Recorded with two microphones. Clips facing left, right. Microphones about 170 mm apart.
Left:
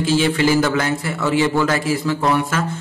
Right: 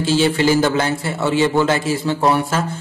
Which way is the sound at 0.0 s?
30° right (ahead or behind).